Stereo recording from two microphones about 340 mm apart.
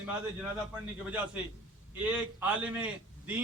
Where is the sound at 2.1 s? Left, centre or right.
Centre.